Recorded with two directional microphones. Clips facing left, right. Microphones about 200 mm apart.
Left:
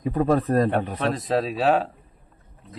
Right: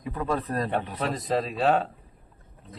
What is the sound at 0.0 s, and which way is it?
Speech, 45° left (ahead or behind).